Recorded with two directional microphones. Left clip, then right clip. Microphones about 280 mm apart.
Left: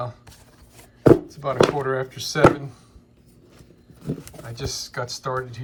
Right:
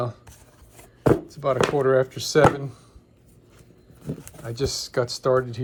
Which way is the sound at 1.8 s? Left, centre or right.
Centre.